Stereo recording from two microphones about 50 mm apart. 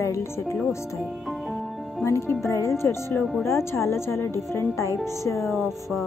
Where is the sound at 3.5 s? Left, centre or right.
Left.